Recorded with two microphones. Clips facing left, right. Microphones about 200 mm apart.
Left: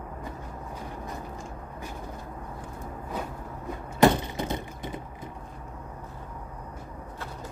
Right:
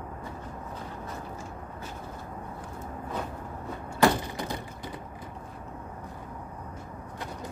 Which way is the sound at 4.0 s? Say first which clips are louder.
Left 3 dB; 20° left (ahead or behind).